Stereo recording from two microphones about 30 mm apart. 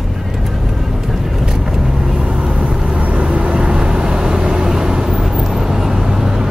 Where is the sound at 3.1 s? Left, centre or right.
Right.